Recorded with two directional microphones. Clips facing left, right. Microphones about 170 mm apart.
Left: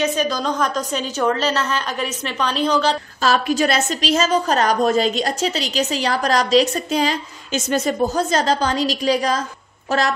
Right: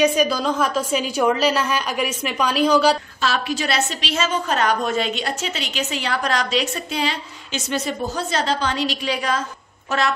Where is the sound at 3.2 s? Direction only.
45° left (ahead or behind).